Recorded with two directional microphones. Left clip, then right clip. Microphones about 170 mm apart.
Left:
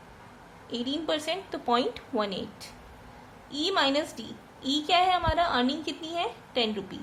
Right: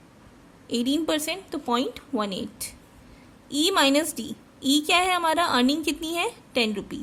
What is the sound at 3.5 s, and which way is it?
A woman's voice, 60° right (ahead or behind).